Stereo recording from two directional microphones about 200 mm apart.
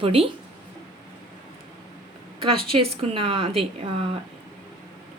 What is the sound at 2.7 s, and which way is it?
Speech, 25° right (ahead or behind).